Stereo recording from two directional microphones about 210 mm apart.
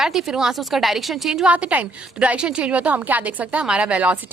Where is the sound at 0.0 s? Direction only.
Centre (ahead or behind).